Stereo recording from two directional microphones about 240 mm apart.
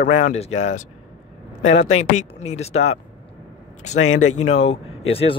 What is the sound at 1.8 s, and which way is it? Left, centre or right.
Speech, left.